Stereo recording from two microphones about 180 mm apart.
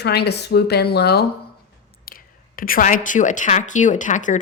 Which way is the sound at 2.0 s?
55° left (ahead or behind).